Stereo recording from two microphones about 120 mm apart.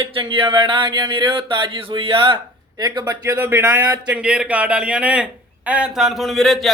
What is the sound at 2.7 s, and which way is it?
Speech, 35° right (ahead or behind).